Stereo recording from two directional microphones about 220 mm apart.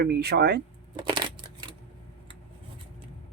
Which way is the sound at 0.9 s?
20° right (ahead or behind).